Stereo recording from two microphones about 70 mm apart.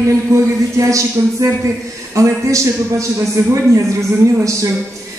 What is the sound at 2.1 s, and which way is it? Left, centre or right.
Speech, right.